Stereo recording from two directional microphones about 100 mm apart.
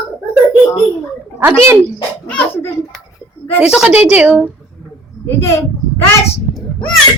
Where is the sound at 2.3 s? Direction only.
20° left (ahead or behind).